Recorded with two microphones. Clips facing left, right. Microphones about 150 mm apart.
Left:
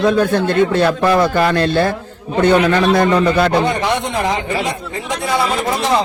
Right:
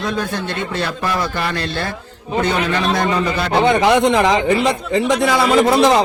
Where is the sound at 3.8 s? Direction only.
90° right.